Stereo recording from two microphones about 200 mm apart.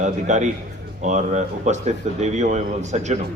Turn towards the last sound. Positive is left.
turn(degrees=-35)  # may be behind; listen again after turning